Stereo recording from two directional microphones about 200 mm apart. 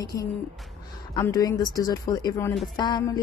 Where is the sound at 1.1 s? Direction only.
15° left (ahead or behind).